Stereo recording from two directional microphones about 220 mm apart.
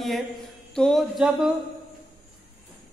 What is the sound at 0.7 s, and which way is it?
Speech, centre (ahead or behind).